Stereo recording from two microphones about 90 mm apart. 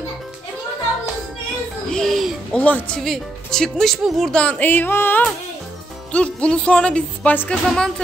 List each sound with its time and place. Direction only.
1.9 s music: 5° left (ahead or behind)
2.6 s speech: 15° left (ahead or behind)
3.0 s speech: 5° left (ahead or behind)
4.4 s music: 15° left (ahead or behind)
6.1 s speech: 10° left (ahead or behind)